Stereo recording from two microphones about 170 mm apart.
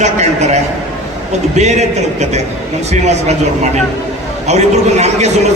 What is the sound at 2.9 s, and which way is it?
A man's voice, 40° right (ahead or behind).